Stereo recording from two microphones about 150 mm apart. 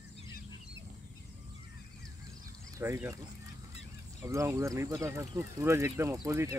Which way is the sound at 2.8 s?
15° right (ahead or behind).